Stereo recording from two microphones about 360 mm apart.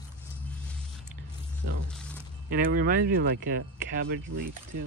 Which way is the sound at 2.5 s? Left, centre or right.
Right.